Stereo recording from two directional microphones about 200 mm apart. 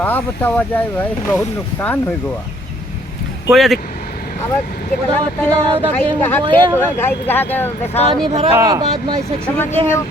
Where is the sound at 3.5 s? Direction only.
Centre (ahead or behind).